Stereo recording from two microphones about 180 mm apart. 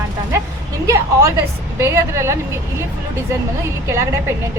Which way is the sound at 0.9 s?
15° right (ahead or behind).